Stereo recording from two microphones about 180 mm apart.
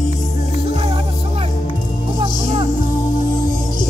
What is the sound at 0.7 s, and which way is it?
Music, 30° right (ahead or behind).